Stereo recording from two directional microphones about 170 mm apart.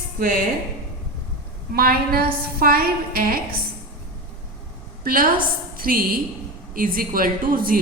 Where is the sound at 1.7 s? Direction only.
60° right (ahead or behind).